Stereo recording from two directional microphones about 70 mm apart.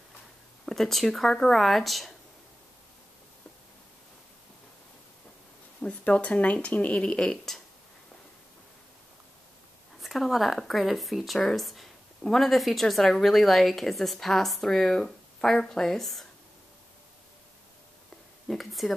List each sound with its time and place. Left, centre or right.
0.7 s speech: centre
5.8 s speech: centre
9.9 s speech: centre
18.5 s speech: centre